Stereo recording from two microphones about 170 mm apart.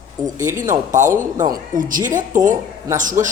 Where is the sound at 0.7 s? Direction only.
50° right (ahead or behind).